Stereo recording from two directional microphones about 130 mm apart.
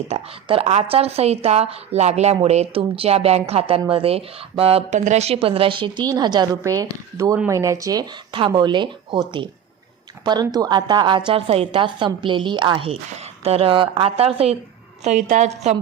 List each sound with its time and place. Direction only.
0.1 s a woman's voice: 45° right (ahead or behind)
4.9 s a woman's voice: 65° right (ahead or behind); by 9.2 s 35° right (ahead or behind)
10.2 s speech: 30° right (ahead or behind)
11.3 s a woman's voice: 50° right (ahead or behind)
15.0 s a woman's voice: 65° right (ahead or behind)